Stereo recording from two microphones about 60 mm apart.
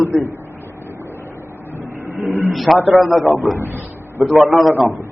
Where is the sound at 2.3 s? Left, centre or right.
Left.